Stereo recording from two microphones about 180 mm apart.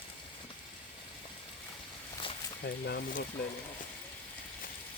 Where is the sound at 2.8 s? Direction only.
60° left (ahead or behind).